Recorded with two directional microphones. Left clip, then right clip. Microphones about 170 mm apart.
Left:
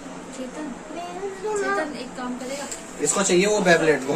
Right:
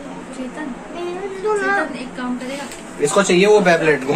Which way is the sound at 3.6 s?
Centre (ahead or behind).